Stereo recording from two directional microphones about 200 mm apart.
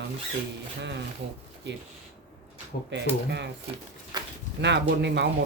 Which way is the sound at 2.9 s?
60° right (ahead or behind).